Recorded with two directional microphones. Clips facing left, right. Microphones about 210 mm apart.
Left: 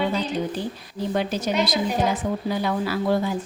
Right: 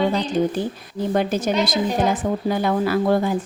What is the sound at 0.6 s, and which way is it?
A woman's voice, 55° right (ahead or behind).